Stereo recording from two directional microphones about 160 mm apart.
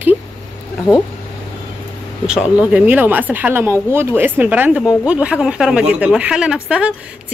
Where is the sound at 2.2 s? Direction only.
5° right (ahead or behind).